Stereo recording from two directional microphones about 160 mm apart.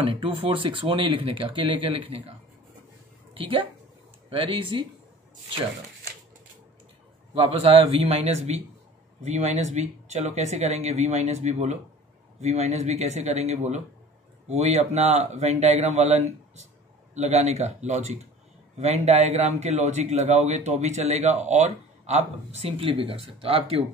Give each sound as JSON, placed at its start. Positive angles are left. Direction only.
{"t": 0.0, "sound": "speech", "side_deg": -35}
{"t": 3.3, "sound": "a woman's voice", "side_deg": -35}
{"t": 7.3, "sound": "speech", "side_deg": -35}